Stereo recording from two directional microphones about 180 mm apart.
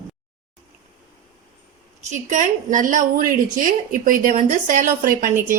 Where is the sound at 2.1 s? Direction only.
45° right (ahead or behind).